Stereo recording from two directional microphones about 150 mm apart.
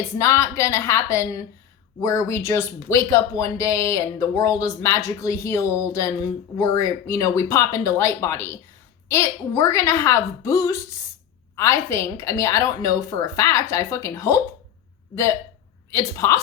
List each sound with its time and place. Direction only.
0.2 s a woman's voice: 20° left (ahead or behind)